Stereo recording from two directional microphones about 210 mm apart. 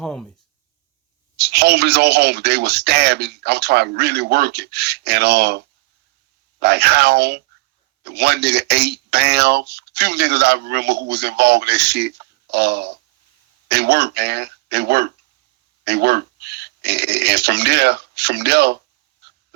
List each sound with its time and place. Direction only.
0.0 s speech: 5° left (ahead or behind)
1.4 s speech: 50° right (ahead or behind)